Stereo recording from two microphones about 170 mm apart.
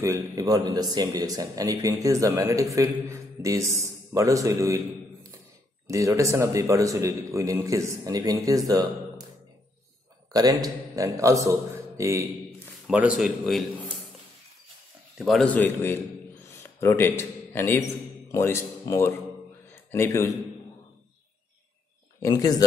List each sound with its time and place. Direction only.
0.0 s speech: 15° right (ahead or behind)
10.3 s a man's voice: 20° right (ahead or behind)
12.8 s a man's voice: 5° right (ahead or behind)
15.1 s a man's voice: centre (ahead or behind)
19.7 s a sound: 15° left (ahead or behind)
22.2 s speech: 20° left (ahead or behind)